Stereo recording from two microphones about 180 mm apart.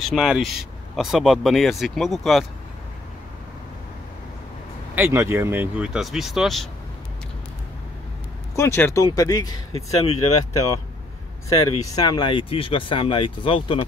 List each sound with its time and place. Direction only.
0.0 s speech: centre (ahead or behind)
4.9 s speech: 15° right (ahead or behind)
8.5 s speech: 15° left (ahead or behind)
9.7 s speech: 35° left (ahead or behind)
11.4 s speech: 20° left (ahead or behind)